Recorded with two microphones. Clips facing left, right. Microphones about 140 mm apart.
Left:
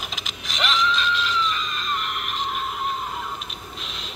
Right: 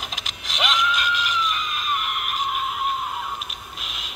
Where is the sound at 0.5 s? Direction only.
10° right (ahead or behind).